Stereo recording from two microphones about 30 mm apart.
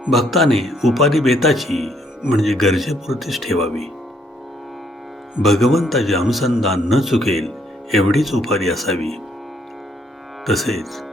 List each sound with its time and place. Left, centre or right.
0.1 s speech: centre
5.4 s speech: centre
10.4 s speech: centre